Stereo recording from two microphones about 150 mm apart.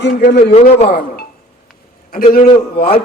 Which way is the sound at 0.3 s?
90° left.